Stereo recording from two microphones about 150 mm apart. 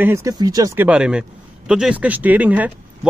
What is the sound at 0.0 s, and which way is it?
Speech, 20° right (ahead or behind).